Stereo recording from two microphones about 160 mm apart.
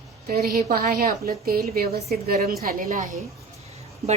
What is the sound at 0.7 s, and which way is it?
A woman's voice, 65° right (ahead or behind).